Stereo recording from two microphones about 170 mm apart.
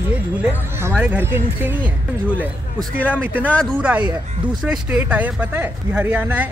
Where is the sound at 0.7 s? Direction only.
10° right (ahead or behind).